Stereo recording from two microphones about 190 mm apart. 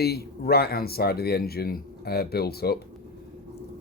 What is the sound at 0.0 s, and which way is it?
Speech, 55° left (ahead or behind).